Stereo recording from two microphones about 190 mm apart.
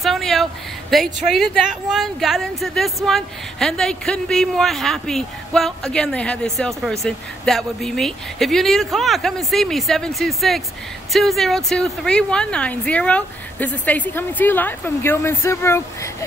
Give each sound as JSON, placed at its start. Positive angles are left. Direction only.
{"t": 0.0, "sound": "a woman's voice", "side_deg": 0}